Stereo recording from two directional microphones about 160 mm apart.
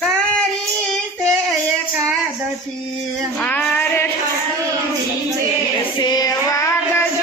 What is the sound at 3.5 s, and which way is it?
Female singing, 10° left (ahead or behind).